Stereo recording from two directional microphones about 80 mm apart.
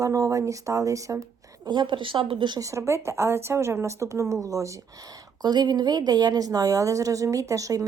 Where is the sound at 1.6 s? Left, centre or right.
Right.